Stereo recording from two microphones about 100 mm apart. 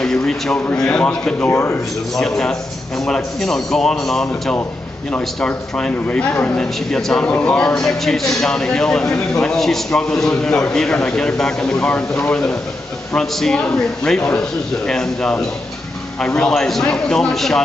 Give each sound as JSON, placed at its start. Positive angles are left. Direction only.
{"t": 0.0, "sound": "speech", "side_deg": 5}
{"t": 13.1, "sound": "speech", "side_deg": 5}